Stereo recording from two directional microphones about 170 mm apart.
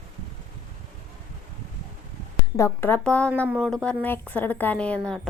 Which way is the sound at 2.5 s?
15° left (ahead or behind).